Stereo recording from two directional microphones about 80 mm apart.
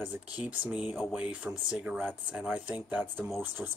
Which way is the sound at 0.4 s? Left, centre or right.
Centre.